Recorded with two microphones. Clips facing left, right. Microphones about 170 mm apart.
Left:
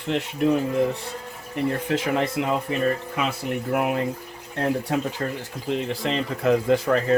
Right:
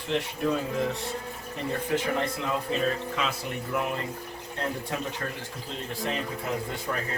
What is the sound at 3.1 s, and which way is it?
Speech, 60° left (ahead or behind).